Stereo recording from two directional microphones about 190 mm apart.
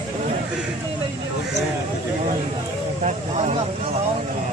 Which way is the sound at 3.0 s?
40° right (ahead or behind).